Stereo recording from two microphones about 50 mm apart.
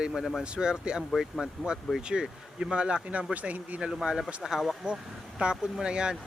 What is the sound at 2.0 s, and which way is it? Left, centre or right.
Speech, centre.